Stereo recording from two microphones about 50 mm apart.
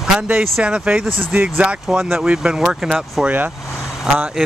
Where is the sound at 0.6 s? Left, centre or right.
Right.